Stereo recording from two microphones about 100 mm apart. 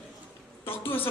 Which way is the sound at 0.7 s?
20° left (ahead or behind).